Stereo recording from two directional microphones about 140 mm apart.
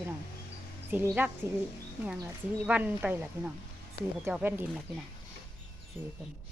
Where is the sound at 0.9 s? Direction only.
15° right (ahead or behind).